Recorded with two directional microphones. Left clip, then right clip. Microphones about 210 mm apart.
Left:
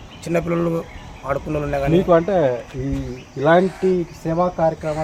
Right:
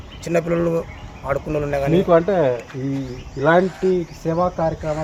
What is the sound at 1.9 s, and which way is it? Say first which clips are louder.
Speech: even; 20° right (ahead or behind).